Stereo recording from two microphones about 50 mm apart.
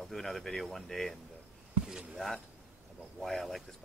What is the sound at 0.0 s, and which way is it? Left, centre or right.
Speech, centre.